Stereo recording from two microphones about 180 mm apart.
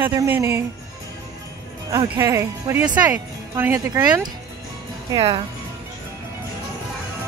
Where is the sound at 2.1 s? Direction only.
15° right (ahead or behind).